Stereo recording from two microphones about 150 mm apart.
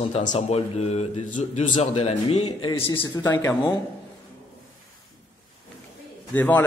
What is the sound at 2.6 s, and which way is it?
Speech, 30° left (ahead or behind).